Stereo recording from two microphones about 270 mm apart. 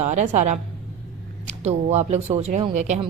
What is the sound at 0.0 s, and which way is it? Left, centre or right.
Speech, right.